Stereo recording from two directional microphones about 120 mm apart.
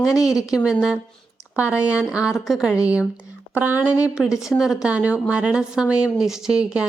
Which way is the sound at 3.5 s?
15° right (ahead or behind).